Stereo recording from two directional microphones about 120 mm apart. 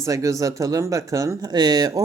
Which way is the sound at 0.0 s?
25° right (ahead or behind).